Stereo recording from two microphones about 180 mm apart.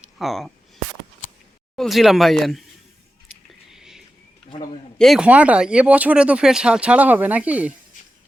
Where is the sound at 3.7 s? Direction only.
5° right (ahead or behind).